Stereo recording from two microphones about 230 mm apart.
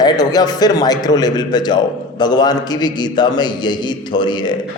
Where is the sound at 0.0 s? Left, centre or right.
Centre.